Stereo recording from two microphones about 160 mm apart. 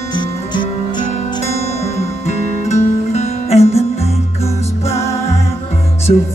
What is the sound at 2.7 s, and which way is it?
Music, 45° left (ahead or behind).